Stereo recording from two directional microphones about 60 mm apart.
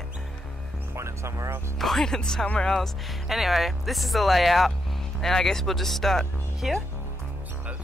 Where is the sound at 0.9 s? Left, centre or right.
Right.